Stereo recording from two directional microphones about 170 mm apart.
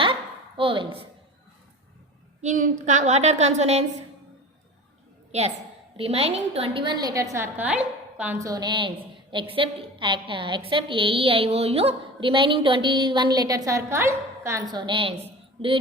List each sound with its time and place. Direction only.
0.0 s a sound: 30° right (ahead or behind)
2.4 s a woman's voice: 45° right (ahead or behind)
6.0 s a woman's voice: 35° right (ahead or behind); by 8.4 s 5° right (ahead or behind)
8.4 s a woman's voice: 20° right (ahead or behind)